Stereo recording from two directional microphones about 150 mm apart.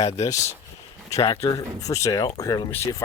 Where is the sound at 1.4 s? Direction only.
20° left (ahead or behind).